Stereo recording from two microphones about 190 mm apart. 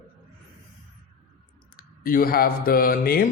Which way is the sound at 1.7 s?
50° left (ahead or behind).